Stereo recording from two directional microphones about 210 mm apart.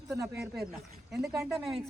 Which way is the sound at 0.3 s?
5° right (ahead or behind).